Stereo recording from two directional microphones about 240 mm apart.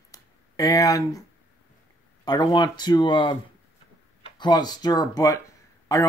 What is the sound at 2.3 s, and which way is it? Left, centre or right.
Speech, centre.